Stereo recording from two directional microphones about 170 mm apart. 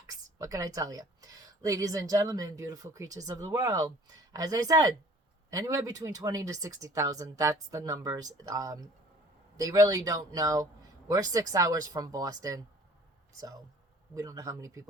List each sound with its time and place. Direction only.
0.1 s a woman's voice: 20° right (ahead or behind)
14.2 s a woman's voice: 20° right (ahead or behind)